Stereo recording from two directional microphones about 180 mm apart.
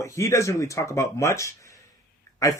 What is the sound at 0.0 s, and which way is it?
Speech, 15° left (ahead or behind).